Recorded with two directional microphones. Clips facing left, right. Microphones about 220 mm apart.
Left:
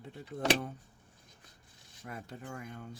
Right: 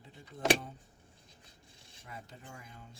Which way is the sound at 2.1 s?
60° left (ahead or behind).